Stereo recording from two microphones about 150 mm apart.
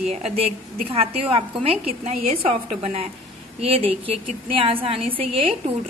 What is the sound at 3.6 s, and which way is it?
A woman's voice, 40° right (ahead or behind).